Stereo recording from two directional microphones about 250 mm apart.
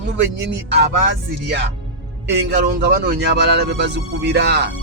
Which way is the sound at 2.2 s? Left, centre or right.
Right.